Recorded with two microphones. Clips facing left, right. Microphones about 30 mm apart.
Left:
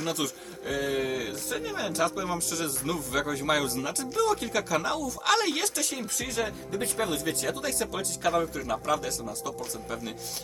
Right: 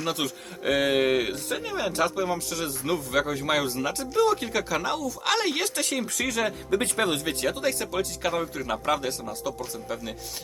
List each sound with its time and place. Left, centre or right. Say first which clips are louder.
0.0 s speech: right 2 dB; centre
0.6 s a sound: right 7 dB; right
1.2 s speech: right 5 dB; right
1.7 s speech: right 3 dB; centre
5.8 s speech: right 5 dB; right
7.5 s speech: right 4 dB; centre
8.7 s speech: right 3 dB; right; by 10.2 s centre